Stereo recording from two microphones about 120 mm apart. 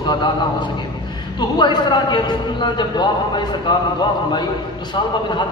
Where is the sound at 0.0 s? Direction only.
40° left (ahead or behind).